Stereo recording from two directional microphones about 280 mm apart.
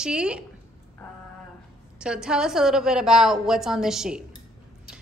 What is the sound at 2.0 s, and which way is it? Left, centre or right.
A woman's voice, centre.